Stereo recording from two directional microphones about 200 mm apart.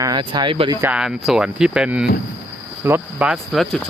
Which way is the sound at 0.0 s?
20° right (ahead or behind).